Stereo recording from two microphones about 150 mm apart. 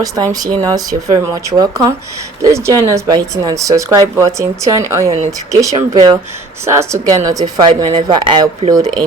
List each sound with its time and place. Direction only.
0.4 s speech: 25° right (ahead or behind)